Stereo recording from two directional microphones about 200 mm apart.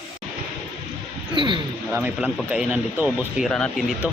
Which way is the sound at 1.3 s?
25° right (ahead or behind).